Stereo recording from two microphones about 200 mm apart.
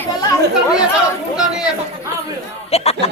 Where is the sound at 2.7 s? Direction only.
30° left (ahead or behind).